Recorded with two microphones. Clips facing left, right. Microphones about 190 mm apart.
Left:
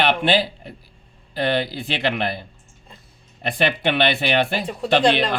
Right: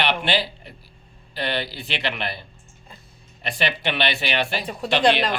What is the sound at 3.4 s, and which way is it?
Speech, 50° left (ahead or behind).